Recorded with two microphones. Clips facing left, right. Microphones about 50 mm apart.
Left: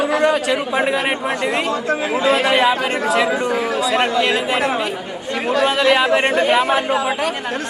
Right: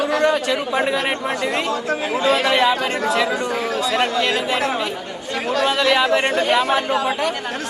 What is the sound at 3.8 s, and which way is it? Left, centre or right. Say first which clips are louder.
Speech: left 2 dB; centre.